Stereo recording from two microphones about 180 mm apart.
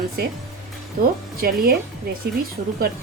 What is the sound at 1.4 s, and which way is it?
Speech, 55° right (ahead or behind).